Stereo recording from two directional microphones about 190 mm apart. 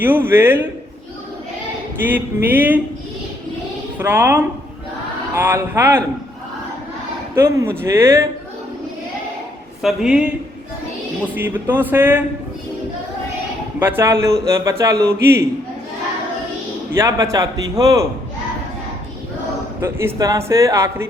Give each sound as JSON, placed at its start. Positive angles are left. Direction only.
{"t": 0.0, "sound": "speech", "side_deg": -10}
{"t": 2.0, "sound": "speech", "side_deg": -10}
{"t": 3.9, "sound": "speech", "side_deg": -10}
{"t": 7.3, "sound": "speech", "side_deg": -15}
{"t": 9.8, "sound": "speech", "side_deg": -5}
{"t": 11.3, "sound": "speech", "side_deg": -10}
{"t": 13.7, "sound": "speech", "side_deg": -10}
{"t": 16.9, "sound": "speech", "side_deg": -15}
{"t": 19.8, "sound": "speech", "side_deg": -10}